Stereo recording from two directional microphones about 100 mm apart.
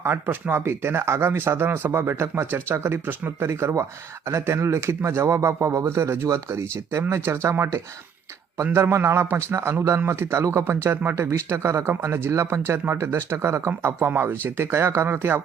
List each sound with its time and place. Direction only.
0.0 s a man's voice: 20° right (ahead or behind)